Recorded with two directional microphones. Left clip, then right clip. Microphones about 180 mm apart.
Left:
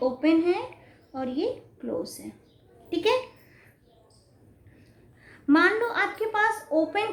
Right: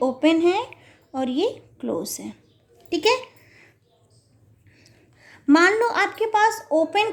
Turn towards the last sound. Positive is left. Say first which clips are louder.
# right 5 dB
turn(degrees=-40)  # may be behind; listen again after turning